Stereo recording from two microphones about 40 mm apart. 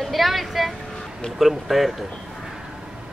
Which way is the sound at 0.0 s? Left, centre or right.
Centre.